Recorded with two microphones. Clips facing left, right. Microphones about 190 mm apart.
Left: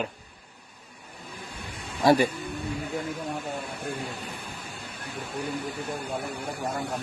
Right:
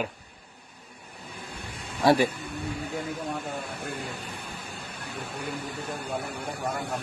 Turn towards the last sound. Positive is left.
turn(degrees=-60)  # may be behind; listen again after turning